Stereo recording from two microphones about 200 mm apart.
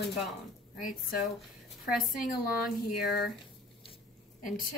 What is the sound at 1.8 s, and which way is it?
Speech, 5° right (ahead or behind).